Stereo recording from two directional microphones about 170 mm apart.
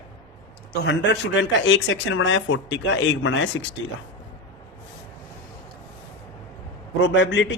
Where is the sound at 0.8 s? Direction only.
90° left.